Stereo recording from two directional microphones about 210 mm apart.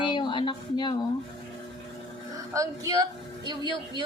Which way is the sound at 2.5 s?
15° right (ahead or behind).